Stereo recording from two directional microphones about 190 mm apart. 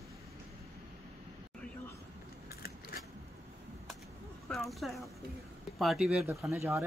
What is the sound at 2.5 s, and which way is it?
Keys jangling, 55° left (ahead or behind).